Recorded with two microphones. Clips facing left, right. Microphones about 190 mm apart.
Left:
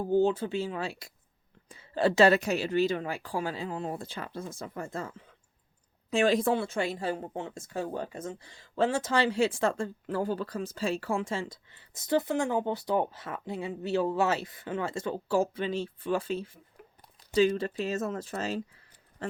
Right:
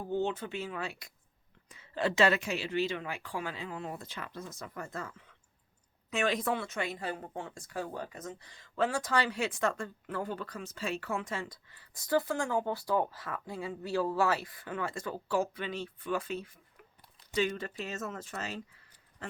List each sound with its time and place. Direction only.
0.0 s speech: 35° left (ahead or behind)